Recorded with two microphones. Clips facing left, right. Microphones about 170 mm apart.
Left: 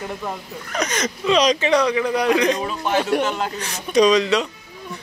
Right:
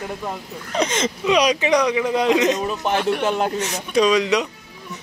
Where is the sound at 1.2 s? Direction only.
10° right (ahead or behind).